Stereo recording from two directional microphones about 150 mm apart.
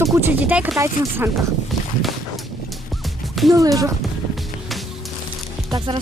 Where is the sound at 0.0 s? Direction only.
20° right (ahead or behind).